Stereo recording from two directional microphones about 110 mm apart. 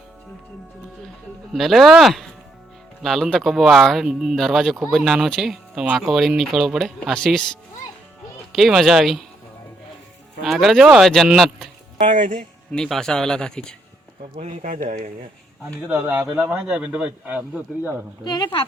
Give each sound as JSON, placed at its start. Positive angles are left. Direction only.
{"t": 1.5, "sound": "speech", "side_deg": 0}
{"t": 10.4, "sound": "speech", "side_deg": 0}
{"t": 12.7, "sound": "speech", "side_deg": 5}
{"t": 14.3, "sound": "speech", "side_deg": -70}
{"t": 15.9, "sound": "a man's voice", "side_deg": -15}
{"t": 18.2, "sound": "a woman's voice", "side_deg": 40}